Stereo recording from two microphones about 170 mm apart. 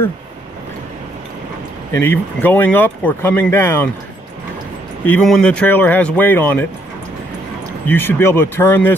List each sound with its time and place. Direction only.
1.9 s speech: 15° left (ahead or behind)
5.0 s speech: 5° left (ahead or behind)
7.8 s speech: 10° left (ahead or behind)